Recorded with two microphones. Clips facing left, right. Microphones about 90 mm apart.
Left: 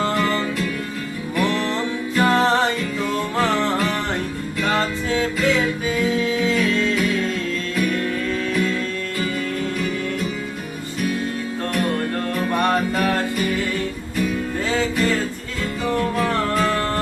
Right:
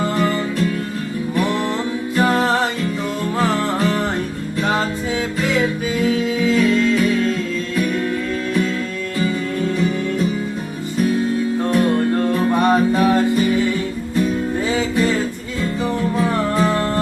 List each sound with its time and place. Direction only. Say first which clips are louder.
1.4 s music: even; 20° right (ahead or behind)
4.6 s music: right 1 dB; 15° right (ahead or behind)
6.2 s music: right 3 dB; 5° right (ahead or behind)
11.7 s music: right 5 dB; 20° right (ahead or behind)
14.7 s music: right 1 dB; 15° right (ahead or behind)